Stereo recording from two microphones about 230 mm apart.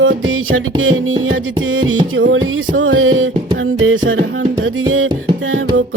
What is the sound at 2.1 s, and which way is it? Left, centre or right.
Music, right.